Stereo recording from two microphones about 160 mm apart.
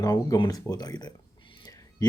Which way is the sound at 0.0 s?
20° left (ahead or behind).